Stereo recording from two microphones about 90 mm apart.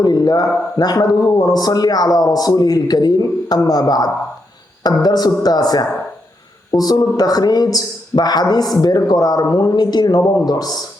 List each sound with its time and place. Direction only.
0.0 s a man's voice: 45° left (ahead or behind)